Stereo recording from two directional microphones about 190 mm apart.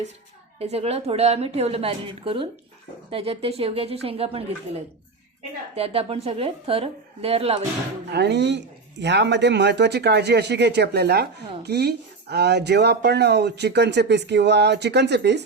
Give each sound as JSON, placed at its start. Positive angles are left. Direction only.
{"t": 0.6, "sound": "a woman's voice", "side_deg": -35}
{"t": 5.7, "sound": "a woman's voice", "side_deg": -30}
{"t": 8.1, "sound": "speech", "side_deg": -65}